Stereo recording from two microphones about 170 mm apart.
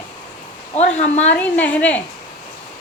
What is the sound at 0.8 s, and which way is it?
Speech, 40° left (ahead or behind).